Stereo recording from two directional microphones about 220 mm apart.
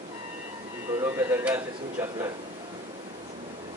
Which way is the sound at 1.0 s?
10° right (ahead or behind).